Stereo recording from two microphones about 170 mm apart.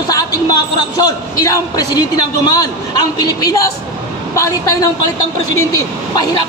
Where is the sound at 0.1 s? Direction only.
20° left (ahead or behind).